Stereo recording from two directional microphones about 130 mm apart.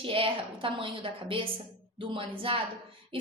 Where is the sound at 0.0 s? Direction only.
45° right (ahead or behind).